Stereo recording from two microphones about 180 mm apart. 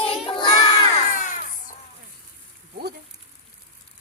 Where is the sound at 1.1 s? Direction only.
45° left (ahead or behind).